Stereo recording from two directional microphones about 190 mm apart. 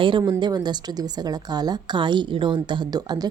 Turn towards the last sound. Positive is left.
turn(degrees=-20)  # may be behind; listen again after turning